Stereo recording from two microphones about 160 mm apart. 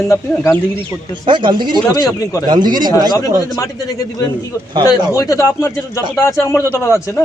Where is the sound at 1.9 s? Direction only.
25° left (ahead or behind).